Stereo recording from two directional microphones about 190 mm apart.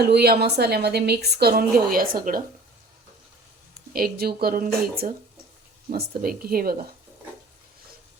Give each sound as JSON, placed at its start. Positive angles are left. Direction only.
{"t": 0.0, "sound": "a woman's voice", "side_deg": -55}
{"t": 3.9, "sound": "speech", "side_deg": -55}